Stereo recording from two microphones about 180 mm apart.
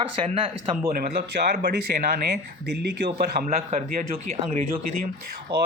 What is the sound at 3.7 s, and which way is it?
Speech, 40° right (ahead or behind).